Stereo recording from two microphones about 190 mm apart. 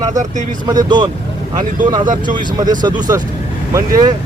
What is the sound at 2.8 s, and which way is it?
Speech, 20° right (ahead or behind).